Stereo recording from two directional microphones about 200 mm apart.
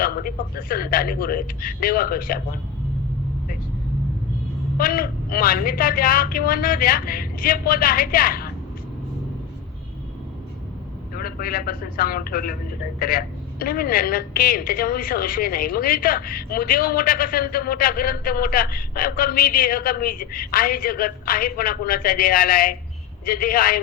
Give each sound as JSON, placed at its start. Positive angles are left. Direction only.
{"t": 0.0, "sound": "a woman's voice", "side_deg": 45}
{"t": 4.8, "sound": "a woman's voice", "side_deg": 45}
{"t": 11.1, "sound": "a woman's voice", "side_deg": 45}